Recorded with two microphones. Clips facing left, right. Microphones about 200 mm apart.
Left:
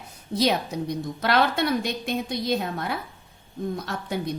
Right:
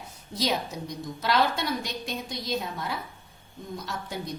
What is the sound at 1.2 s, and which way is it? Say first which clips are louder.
A woman's voice: left 3 dB; 60° left (ahead or behind).